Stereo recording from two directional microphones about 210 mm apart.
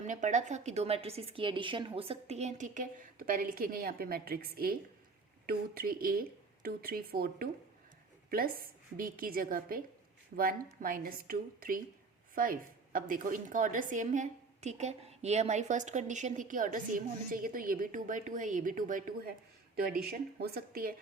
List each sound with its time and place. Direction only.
0.0 s a woman's voice: 35° right (ahead or behind)